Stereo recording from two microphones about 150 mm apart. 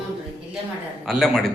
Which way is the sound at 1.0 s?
Centre (ahead or behind).